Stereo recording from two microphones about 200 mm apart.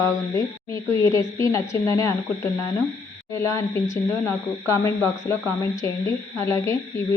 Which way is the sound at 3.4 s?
15° left (ahead or behind).